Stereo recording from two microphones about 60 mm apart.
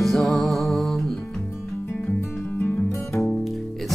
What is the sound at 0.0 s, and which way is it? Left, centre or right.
Music, centre.